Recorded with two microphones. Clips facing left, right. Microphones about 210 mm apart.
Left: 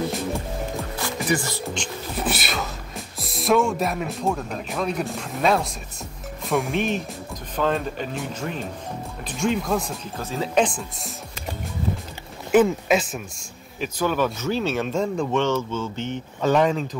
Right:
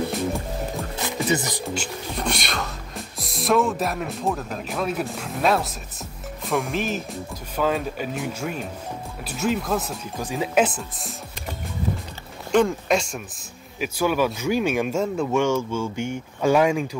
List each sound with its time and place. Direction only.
0.9 s music: 20° right (ahead or behind)
1.6 s speech: 5° right (ahead or behind)
12.4 s speech: 5° left (ahead or behind)
13.7 s speech: 10° right (ahead or behind)